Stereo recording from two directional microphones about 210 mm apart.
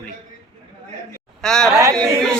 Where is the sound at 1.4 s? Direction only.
5° left (ahead or behind).